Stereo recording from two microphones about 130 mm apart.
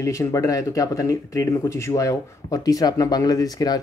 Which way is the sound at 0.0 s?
25° left (ahead or behind).